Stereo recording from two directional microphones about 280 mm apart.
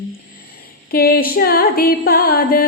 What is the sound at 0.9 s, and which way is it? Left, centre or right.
Music, left.